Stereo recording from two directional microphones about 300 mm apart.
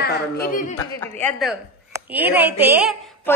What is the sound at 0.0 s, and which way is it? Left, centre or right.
Speech, left.